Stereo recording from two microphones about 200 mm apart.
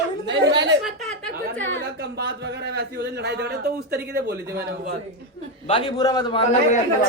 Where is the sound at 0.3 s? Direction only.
65° right (ahead or behind).